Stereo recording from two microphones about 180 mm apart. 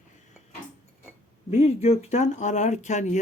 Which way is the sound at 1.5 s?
35° left (ahead or behind).